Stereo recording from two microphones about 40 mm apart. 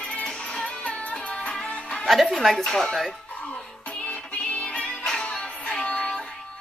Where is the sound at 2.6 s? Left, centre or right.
Centre.